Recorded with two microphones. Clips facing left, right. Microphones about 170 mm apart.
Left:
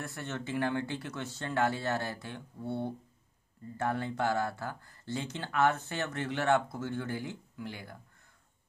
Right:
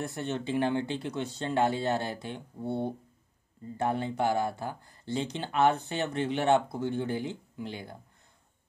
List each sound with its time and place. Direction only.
0.0 s speech: 20° right (ahead or behind)